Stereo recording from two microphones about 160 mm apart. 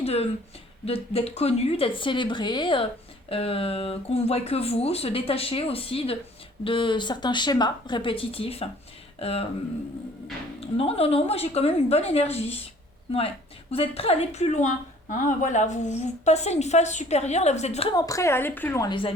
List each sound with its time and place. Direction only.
0.0 s speech: 40° left (ahead or behind)
10.6 s a woman's voice: 40° left (ahead or behind)
17.9 s a woman's voice: 20° left (ahead or behind)
18.9 s speech: 30° left (ahead or behind)